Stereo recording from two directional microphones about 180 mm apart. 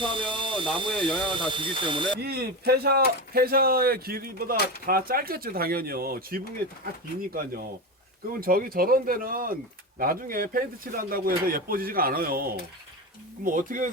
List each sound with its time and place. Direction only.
0.0 s a sound: 25° right (ahead or behind)
0.8 s speech: 25° right (ahead or behind)
2.2 s speech: 60° right (ahead or behind)
8.3 s speech: 55° right (ahead or behind)